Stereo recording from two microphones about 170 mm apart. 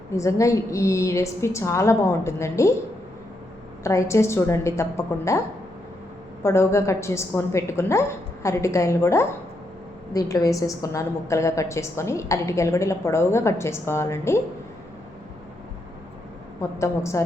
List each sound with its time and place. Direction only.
0.2 s a woman's voice: 20° left (ahead or behind)
3.8 s a woman's voice: 15° left (ahead or behind)
6.4 s a woman's voice: 15° left (ahead or behind)
16.6 s a woman's voice: 15° left (ahead or behind)